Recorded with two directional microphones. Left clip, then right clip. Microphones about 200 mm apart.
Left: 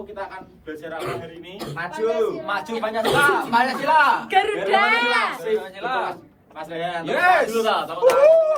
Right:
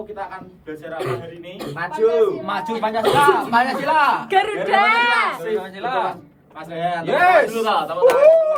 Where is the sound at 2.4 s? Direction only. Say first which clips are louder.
Right 3 dB; 50° right (ahead or behind).